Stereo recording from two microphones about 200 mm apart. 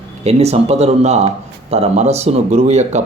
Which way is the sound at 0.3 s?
30° right (ahead or behind).